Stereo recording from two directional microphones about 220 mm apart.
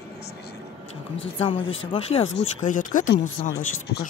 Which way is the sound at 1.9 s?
25° left (ahead or behind).